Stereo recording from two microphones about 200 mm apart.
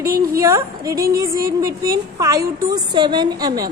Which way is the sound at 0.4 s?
15° right (ahead or behind).